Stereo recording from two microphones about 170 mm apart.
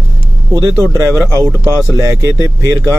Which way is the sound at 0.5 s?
15° right (ahead or behind).